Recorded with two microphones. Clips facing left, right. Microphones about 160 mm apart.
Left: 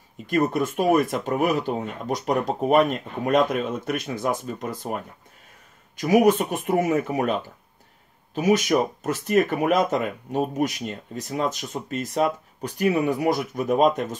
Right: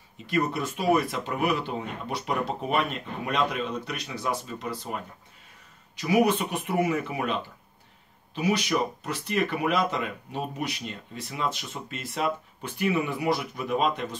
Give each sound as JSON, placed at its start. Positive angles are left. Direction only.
{"t": 0.3, "sound": "speech", "side_deg": 50}
{"t": 8.4, "sound": "speech", "side_deg": 45}